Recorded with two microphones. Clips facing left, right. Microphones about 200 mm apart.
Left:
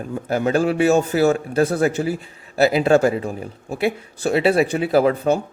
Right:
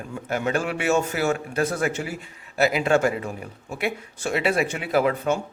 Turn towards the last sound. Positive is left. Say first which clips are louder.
# left 5 dB
turn(degrees=35)  # may be behind; listen again after turning